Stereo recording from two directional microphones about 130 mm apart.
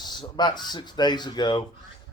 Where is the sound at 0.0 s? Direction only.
35° left (ahead or behind).